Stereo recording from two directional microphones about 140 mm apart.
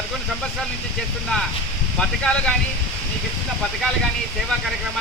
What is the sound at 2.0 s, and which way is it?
Speech, 5° left (ahead or behind).